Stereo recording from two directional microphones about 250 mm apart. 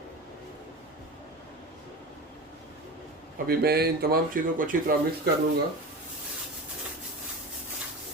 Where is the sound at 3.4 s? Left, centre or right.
Right.